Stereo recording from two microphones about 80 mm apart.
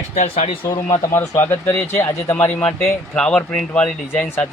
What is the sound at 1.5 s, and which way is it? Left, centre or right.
Speech, left.